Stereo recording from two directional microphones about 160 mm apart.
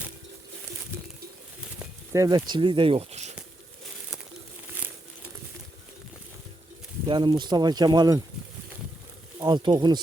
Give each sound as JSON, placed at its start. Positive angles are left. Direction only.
{"t": 2.1, "sound": "speech", "side_deg": -25}
{"t": 7.1, "sound": "speech", "side_deg": -30}
{"t": 9.4, "sound": "speech", "side_deg": -25}